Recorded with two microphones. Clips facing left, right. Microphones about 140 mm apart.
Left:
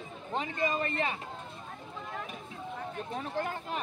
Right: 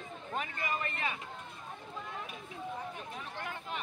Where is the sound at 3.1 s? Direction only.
40° left (ahead or behind).